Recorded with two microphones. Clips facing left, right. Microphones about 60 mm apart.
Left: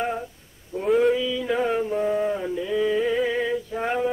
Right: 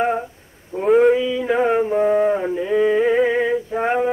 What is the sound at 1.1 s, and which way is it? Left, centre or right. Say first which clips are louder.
Mantra: right 5 dB; right.